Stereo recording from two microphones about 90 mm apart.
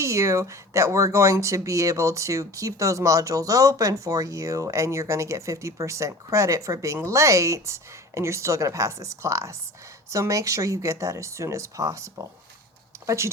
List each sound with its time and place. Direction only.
0.0 s speech: 35° right (ahead or behind)